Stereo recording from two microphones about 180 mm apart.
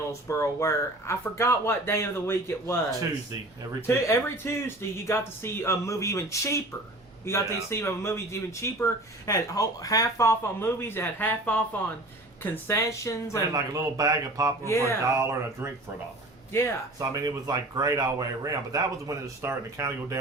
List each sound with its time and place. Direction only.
0.1 s speech: 15° left (ahead or behind)
13.5 s speech: 20° right (ahead or behind)
16.5 s speech: 15° left (ahead or behind)
17.0 s speech: 20° right (ahead or behind)